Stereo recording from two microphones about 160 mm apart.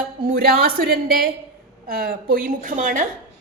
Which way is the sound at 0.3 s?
75° right (ahead or behind).